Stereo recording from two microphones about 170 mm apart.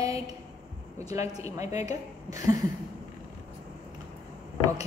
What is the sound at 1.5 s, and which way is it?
Speech, 40° left (ahead or behind).